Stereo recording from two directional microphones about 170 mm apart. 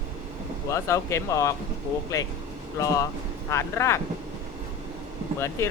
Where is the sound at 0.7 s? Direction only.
15° left (ahead or behind).